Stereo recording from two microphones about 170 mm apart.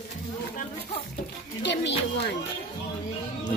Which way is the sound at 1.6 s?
85° left.